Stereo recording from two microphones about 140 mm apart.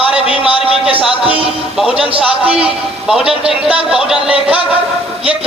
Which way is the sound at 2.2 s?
5° right (ahead or behind).